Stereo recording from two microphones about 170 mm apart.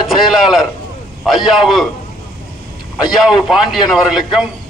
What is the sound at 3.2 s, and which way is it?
A man's voice, centre (ahead or behind).